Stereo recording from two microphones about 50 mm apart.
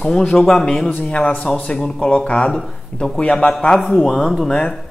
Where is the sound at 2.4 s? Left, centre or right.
Centre.